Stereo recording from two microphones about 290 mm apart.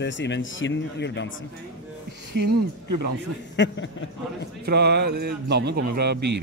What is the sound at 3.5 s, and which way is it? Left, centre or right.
Speech, left.